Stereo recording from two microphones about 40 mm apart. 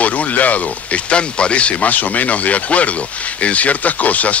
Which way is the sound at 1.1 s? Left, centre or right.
Left.